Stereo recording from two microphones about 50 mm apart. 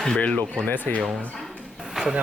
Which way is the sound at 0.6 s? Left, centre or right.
Left.